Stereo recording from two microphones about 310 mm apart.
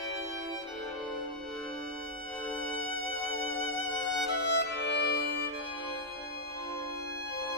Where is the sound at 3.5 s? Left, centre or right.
Left.